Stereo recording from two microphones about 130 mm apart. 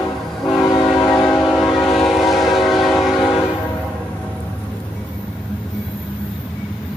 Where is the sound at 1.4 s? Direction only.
5° left (ahead or behind).